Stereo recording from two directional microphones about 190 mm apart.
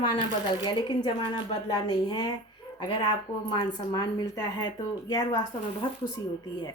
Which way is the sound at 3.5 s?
25° left (ahead or behind).